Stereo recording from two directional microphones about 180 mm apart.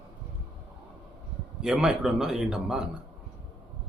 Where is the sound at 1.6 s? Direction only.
5° right (ahead or behind).